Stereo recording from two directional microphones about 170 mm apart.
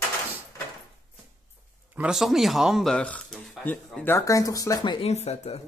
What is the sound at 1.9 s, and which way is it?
Speech, 5° right (ahead or behind).